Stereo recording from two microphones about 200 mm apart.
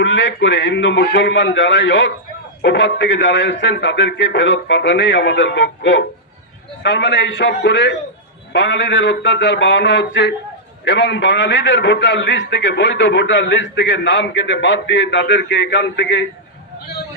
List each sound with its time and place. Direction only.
0.0 s a man's voice: 65° left (ahead or behind)